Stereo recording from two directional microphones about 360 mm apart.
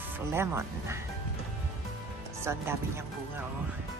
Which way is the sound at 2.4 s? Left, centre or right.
Centre.